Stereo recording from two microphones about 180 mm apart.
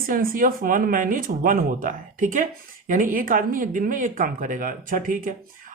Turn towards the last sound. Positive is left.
turn(degrees=-50)  # may be behind; listen again after turning